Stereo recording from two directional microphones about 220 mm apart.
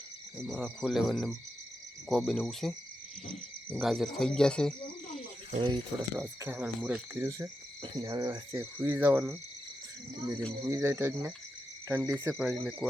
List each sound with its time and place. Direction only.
0.3 s speech: centre (ahead or behind)
5.5 s speech: 20° right (ahead or behind)
6.2 s speech: 10° right (ahead or behind)
10.6 s speech: 10° right (ahead or behind)